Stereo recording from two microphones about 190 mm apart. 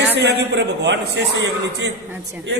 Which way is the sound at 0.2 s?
65° right (ahead or behind).